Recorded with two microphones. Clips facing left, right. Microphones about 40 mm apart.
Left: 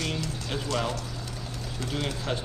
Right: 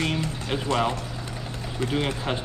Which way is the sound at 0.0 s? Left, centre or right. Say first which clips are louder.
Right 5 dB; right.